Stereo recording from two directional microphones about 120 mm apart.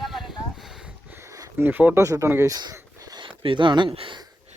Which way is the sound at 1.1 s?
25° right (ahead or behind).